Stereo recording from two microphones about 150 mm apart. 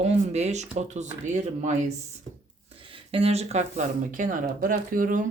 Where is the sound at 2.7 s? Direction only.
35° right (ahead or behind); by 5.2 s 65° right (ahead or behind).